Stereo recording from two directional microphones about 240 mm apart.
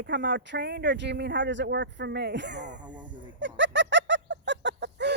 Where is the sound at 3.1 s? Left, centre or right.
Right.